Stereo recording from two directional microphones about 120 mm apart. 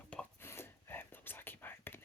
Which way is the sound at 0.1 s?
10° left (ahead or behind).